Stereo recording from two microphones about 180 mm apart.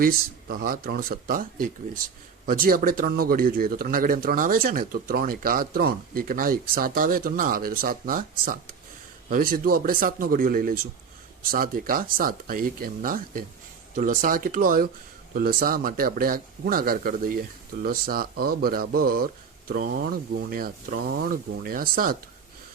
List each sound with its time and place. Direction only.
0.0 s a man's voice: 55° right (ahead or behind)